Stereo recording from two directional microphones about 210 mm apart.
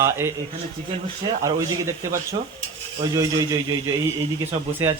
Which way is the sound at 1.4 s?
15° right (ahead or behind).